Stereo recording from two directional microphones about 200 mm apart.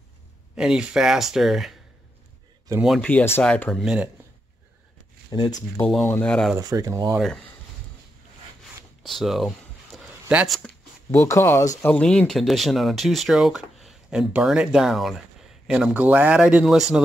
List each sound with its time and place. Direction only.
0.6 s speech: 5° right (ahead or behind)
2.8 s speech: centre (ahead or behind)
3.8 s speech: 5° right (ahead or behind)
5.3 s speech: 20° left (ahead or behind)
5.8 s speech: 5° left (ahead or behind)
6.5 s speech: 15° right (ahead or behind)
9.0 s speech: centre (ahead or behind)
11.1 s speech: 15° left (ahead or behind)
11.9 s speech: 5° left (ahead or behind)